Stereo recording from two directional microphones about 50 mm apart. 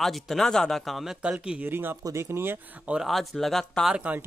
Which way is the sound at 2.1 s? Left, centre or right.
Right.